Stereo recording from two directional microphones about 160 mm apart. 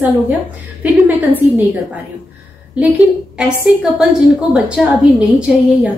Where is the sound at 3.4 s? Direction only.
5° right (ahead or behind).